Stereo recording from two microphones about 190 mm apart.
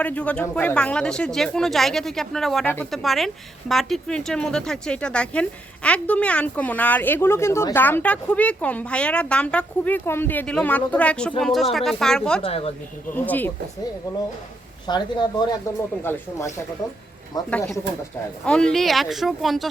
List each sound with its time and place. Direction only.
0.0 s speech: 5° left (ahead or behind)
12.4 s a woman's voice: 30° left (ahead or behind)
13.1 s speech: 10° left (ahead or behind)
14.8 s speech: 20° left (ahead or behind)
16.1 s speech: 10° left (ahead or behind)
18.4 s speech: 5° left (ahead or behind)